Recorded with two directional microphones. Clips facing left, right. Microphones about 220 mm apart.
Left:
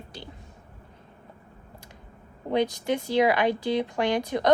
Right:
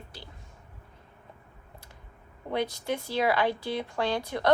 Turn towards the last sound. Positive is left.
turn(degrees=20)  # may be behind; listen again after turning